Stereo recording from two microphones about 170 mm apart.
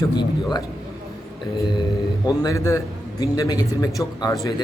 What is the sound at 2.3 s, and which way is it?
A man's voice, 20° left (ahead or behind).